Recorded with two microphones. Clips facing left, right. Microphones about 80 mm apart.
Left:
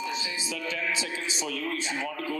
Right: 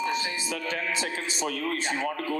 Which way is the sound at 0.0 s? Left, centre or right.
Right.